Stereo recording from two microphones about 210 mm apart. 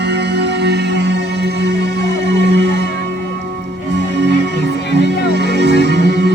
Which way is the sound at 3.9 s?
55° right (ahead or behind).